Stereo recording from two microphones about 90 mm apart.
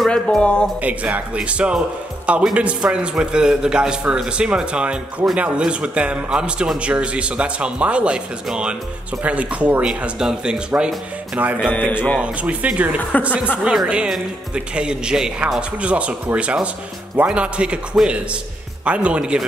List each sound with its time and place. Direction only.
0.0 s speech: 5° left (ahead or behind)
0.7 s a man's voice: 15° right (ahead or behind)
11.7 s speech: 20° left (ahead or behind)
12.2 s a man's voice: 15° right (ahead or behind)
13.1 s speech: 15° left (ahead or behind)
13.7 s a man's voice: 10° right (ahead or behind)